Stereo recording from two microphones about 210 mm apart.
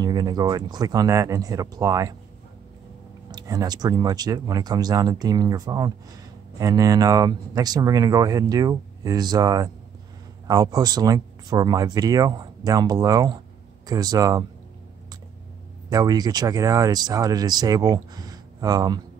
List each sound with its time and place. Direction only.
0.0 s speech: 20° right (ahead or behind)
3.3 s speech: 20° right (ahead or behind)
15.9 s speech: 15° right (ahead or behind)